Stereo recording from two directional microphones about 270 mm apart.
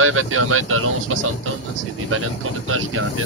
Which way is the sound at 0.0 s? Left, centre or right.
Right.